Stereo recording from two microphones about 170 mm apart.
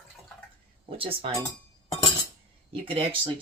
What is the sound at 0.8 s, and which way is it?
Speech, 30° right (ahead or behind).